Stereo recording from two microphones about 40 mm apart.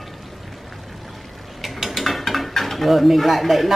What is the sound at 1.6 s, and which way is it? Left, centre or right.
Speech, centre.